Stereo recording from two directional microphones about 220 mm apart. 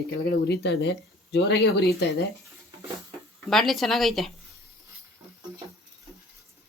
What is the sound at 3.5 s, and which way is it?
Speech, centre (ahead or behind).